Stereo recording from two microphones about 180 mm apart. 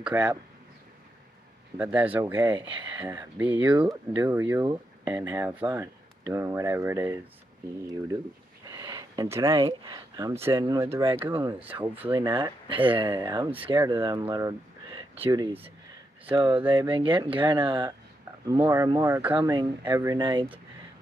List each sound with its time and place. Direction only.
0.0 s speech: 5° right (ahead or behind)
1.8 s speech: 10° right (ahead or behind)
2.6 s speech: 25° right (ahead or behind)
8.6 s speech: 20° right (ahead or behind)
12.1 s speech: 25° right (ahead or behind)
20.2 s speech: 25° right (ahead or behind)